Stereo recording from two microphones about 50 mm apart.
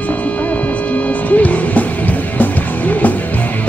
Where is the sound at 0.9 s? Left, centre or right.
Left.